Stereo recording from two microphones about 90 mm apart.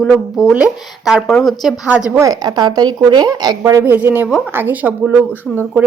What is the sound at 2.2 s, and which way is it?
Speech, 45° right (ahead or behind).